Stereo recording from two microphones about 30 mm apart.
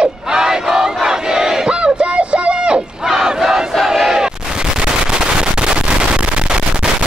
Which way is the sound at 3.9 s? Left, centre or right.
Centre.